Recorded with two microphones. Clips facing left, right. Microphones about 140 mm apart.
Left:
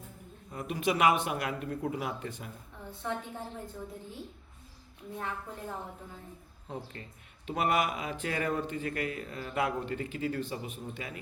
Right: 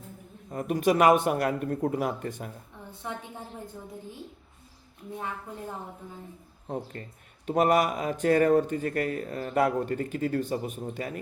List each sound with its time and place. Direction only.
0.5 s speech: 45° right (ahead or behind)
7.0 s speech: 45° right (ahead or behind)